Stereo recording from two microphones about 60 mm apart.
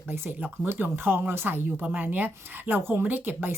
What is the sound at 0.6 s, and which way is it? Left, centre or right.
A woman's voice, right.